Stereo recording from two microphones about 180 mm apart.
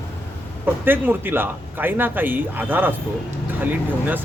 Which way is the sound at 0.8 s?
10° right (ahead or behind).